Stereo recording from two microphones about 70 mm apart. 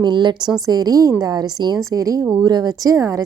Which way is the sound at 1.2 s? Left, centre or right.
Right.